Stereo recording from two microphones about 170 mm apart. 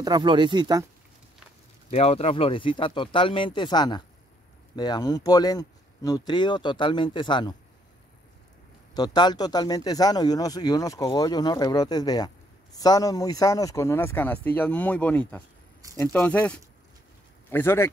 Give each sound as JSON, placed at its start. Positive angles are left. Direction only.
{"t": 0.0, "sound": "speech", "side_deg": -25}
{"t": 1.9, "sound": "speech", "side_deg": 40}
{"t": 8.9, "sound": "speech", "side_deg": 25}